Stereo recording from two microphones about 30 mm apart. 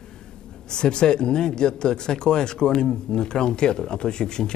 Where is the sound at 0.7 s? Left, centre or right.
Left.